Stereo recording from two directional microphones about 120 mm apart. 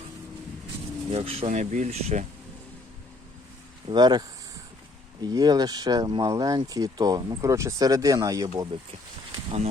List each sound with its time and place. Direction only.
1.1 s speech: 50° right (ahead or behind)
1.5 s speech: 90° right; by 2.2 s 70° right (ahead or behind)
3.8 s speech: 35° right (ahead or behind)